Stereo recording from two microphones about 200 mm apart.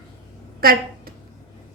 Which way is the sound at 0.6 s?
50° right (ahead or behind).